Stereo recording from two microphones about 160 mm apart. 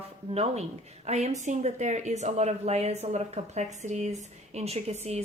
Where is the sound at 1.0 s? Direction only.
40° right (ahead or behind).